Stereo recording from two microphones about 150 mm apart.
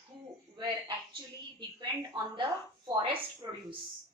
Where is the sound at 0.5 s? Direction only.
30° right (ahead or behind).